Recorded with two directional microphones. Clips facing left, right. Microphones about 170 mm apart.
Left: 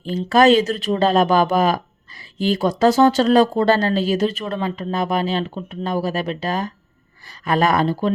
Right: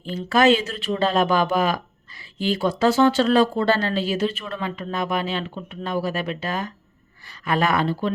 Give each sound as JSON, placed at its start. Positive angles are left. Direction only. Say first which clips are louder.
{"t": 0.0, "sound": "speech", "louder": "left 4 dB", "side_deg": 40}